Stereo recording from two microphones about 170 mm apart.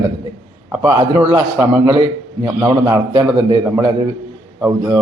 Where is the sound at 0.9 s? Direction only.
25° right (ahead or behind).